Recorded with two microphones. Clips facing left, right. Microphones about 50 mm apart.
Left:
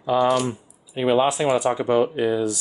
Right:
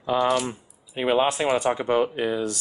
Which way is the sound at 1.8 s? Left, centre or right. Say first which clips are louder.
Left 3 dB; right.